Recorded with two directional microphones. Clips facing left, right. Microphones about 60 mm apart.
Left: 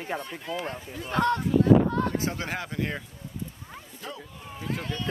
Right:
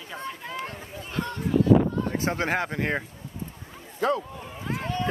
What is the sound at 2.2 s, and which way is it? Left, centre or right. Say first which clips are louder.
Speech: right 5 dB; right.